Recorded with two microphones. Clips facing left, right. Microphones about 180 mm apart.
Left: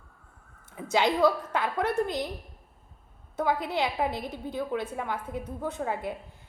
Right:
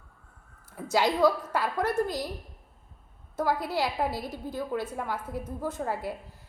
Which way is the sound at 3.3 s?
Centre (ahead or behind).